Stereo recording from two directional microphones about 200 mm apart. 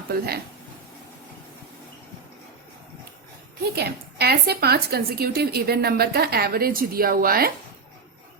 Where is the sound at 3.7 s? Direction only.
55° right (ahead or behind).